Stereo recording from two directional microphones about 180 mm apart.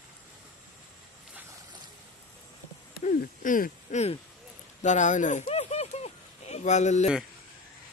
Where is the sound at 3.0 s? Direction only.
45° left (ahead or behind).